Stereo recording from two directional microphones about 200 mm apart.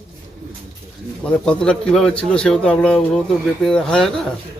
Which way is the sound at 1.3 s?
5° left (ahead or behind).